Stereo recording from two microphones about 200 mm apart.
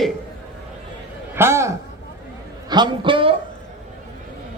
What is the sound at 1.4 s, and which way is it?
A man's voice, 10° right (ahead or behind).